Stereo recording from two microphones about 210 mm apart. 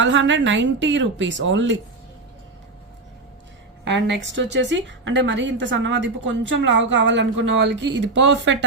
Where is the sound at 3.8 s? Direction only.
55° right (ahead or behind).